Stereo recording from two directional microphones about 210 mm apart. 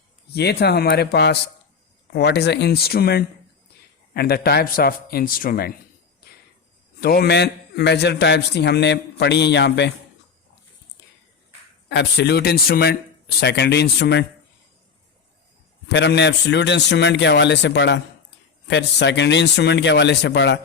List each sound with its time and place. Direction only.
0.3 s a man's voice: 50° left (ahead or behind)
7.0 s a man's voice: 50° left (ahead or behind)
11.9 s a man's voice: 55° left (ahead or behind)
15.9 s a man's voice: 55° left (ahead or behind)